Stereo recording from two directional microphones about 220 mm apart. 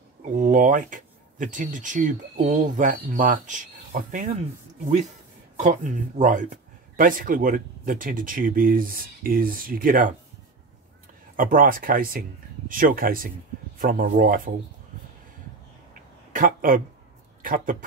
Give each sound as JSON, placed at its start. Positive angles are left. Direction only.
{"t": 0.2, "sound": "speech", "side_deg": -35}
{"t": 5.6, "sound": "speech", "side_deg": -30}
{"t": 11.3, "sound": "speech", "side_deg": -40}
{"t": 15.9, "sound": "a sound", "side_deg": -40}
{"t": 17.4, "sound": "speech", "side_deg": -40}